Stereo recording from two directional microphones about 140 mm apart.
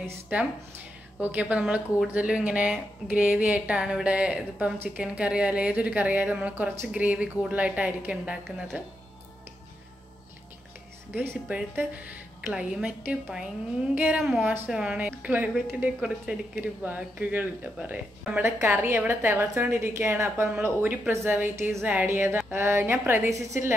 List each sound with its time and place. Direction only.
0.0 s speech: 15° right (ahead or behind)
11.1 s speech: 10° right (ahead or behind)